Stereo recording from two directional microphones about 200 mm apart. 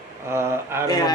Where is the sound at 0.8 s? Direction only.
20° left (ahead or behind).